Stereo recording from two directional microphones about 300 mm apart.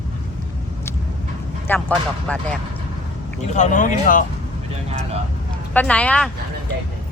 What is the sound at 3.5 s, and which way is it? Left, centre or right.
Speech, left.